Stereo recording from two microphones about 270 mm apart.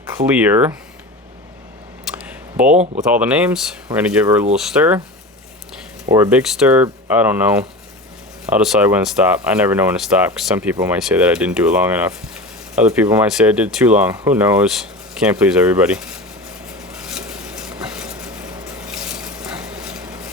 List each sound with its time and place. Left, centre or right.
0.4 s speech: centre
2.1 s a sound: centre
2.7 s speech: right
3.1 s speech: centre
6.1 s speech: centre
16.9 s a sound: centre